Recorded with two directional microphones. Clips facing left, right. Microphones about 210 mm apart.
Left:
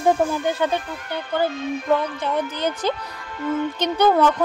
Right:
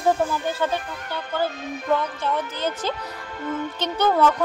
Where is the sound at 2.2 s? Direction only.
15° left (ahead or behind).